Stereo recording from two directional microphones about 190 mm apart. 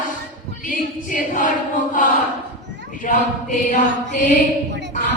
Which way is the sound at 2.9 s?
45° left (ahead or behind).